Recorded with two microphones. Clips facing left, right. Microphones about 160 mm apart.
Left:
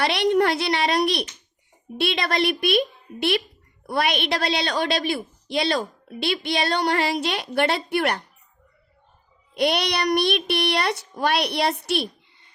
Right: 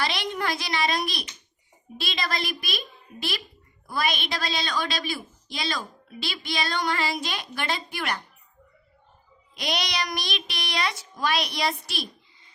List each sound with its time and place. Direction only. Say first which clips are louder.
0.0 s a woman's voice: left 9 dB; 65° left (ahead or behind)
9.6 s a woman's voice: left 7 dB; 60° left (ahead or behind)